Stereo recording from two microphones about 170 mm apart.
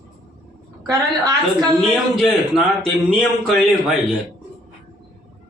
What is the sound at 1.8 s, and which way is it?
A man's voice, centre (ahead or behind).